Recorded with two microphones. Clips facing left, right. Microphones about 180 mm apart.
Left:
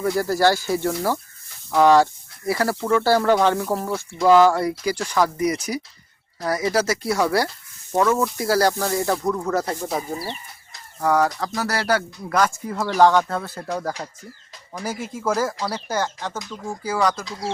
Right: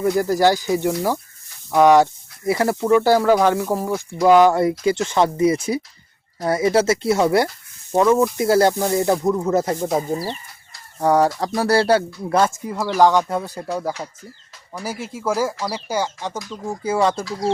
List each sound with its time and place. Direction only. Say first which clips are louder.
0.0 s speech: right 2 dB; 15° right (ahead or behind)
12.6 s speech: right 1 dB; 15° right (ahead or behind)
16.6 s speech: right 3 dB; 25° right (ahead or behind)